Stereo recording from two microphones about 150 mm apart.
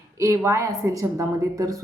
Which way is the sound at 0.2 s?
20° right (ahead or behind).